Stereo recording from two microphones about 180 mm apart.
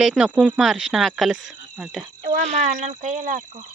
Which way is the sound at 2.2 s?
45° right (ahead or behind).